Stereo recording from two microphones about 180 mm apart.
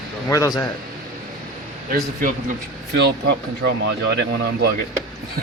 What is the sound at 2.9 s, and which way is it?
Speech, 65° right (ahead or behind).